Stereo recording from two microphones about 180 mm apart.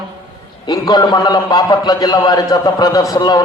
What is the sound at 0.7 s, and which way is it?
A man's voice, 20° left (ahead or behind).